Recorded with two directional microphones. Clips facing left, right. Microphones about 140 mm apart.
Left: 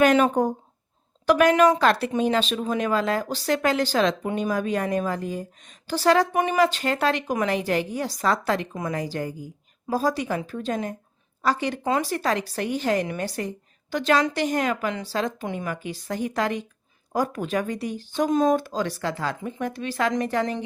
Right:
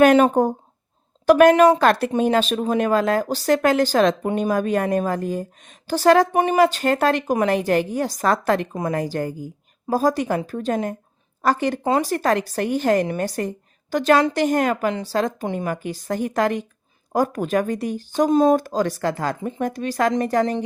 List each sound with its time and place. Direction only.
0.0 s speech: 50° right (ahead or behind)
6.3 s speech: 35° right (ahead or behind)
11.8 s speech: 35° right (ahead or behind)
18.6 s speech: 45° right (ahead or behind)